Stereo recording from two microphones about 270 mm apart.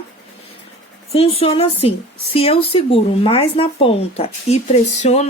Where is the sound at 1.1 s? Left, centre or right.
Left.